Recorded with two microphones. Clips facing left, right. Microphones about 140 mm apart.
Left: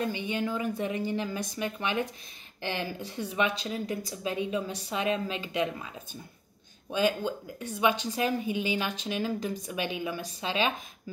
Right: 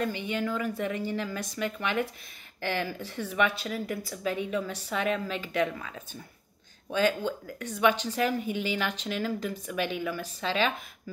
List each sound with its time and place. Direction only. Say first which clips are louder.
0.0 s a woman's voice: even; 20° left (ahead or behind)